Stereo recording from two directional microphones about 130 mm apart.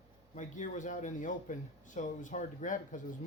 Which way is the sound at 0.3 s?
75° left (ahead or behind).